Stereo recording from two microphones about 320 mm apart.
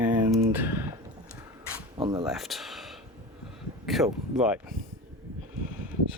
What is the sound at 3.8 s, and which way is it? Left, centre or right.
Speech, centre.